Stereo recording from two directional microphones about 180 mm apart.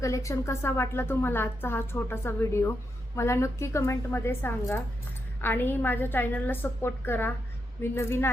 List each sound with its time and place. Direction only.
0.0 s a woman's voice: 15° left (ahead or behind)